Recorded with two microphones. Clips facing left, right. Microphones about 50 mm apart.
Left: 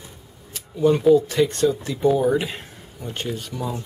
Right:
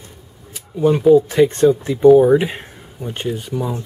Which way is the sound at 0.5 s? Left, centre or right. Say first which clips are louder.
Right 3 dB; centre.